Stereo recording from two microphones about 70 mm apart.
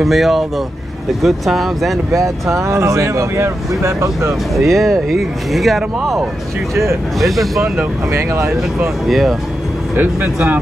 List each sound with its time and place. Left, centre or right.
0.0 s speech: centre
2.1 s speech: right
4.3 s speech: centre
8.1 s speech: right
9.0 s speech: centre
9.9 s speech: right